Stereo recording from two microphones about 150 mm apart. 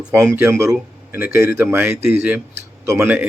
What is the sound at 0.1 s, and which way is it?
A man's voice, 15° right (ahead or behind).